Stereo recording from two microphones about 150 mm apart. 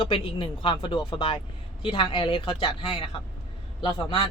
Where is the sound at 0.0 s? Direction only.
35° left (ahead or behind).